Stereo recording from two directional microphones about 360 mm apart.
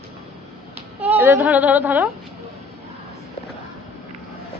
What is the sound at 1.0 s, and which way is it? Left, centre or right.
Speech, centre.